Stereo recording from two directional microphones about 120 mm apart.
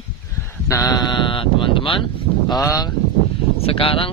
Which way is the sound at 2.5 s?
30° left (ahead or behind).